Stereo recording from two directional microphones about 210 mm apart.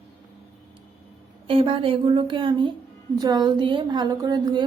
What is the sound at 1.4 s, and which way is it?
A woman's voice, 25° right (ahead or behind).